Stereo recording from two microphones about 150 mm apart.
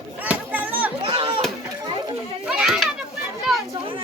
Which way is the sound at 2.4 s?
5° right (ahead or behind).